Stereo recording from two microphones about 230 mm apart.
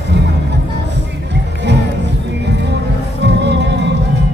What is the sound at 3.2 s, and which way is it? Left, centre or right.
Music, right.